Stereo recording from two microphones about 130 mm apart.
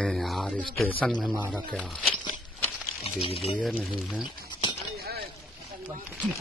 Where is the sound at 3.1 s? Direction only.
50° left (ahead or behind).